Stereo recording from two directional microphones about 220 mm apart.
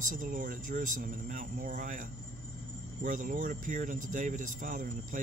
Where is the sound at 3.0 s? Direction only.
35° right (ahead or behind).